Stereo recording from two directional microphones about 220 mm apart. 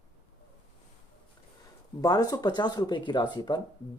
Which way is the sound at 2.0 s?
15° left (ahead or behind).